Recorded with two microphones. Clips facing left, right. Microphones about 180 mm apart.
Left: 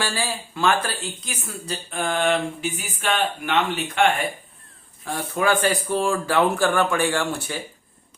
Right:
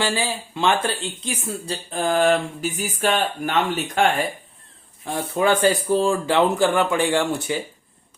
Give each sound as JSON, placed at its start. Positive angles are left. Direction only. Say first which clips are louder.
{"t": 0.0, "sound": "speech", "louder": "right 3 dB", "side_deg": -20}
{"t": 5.0, "sound": "speech", "louder": "right 2 dB", "side_deg": -25}